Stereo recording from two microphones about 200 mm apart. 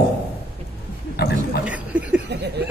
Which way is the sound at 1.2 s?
55° left (ahead or behind).